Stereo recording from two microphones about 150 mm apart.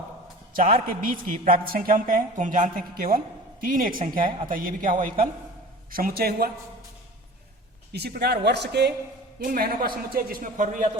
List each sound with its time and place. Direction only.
0.5 s a woman's voice: 70° right (ahead or behind); by 6.5 s 90° right
7.9 s a man's voice: 90° right
9.4 s a woman's voice: 75° right (ahead or behind)